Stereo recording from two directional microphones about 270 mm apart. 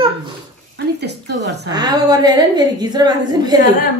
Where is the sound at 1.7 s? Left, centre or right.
Centre.